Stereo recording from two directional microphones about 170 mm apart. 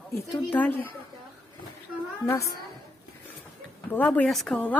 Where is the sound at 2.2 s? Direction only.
20° left (ahead or behind).